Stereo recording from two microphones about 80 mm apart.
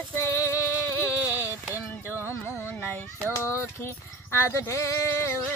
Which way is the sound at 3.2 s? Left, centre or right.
Left.